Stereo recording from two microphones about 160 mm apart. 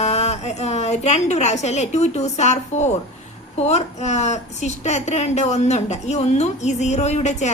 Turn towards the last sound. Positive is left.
turn(degrees=45)  # may be behind; listen again after turning